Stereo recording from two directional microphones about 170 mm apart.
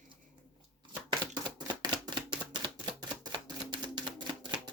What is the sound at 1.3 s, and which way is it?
Chopping, 25° right (ahead or behind).